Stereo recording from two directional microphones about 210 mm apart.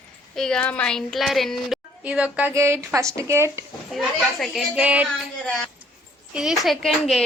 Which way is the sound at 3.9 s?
Centre (ahead or behind).